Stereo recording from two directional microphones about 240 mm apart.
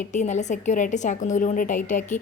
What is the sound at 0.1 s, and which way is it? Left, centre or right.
A woman's voice, left.